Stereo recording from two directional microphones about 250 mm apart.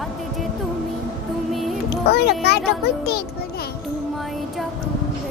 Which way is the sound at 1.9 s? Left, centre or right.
Left.